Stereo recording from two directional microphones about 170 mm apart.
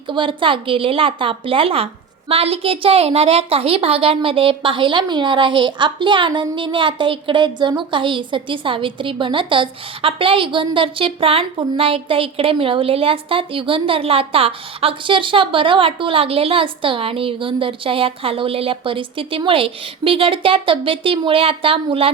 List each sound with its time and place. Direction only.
0.1 s a woman's voice: 30° right (ahead or behind)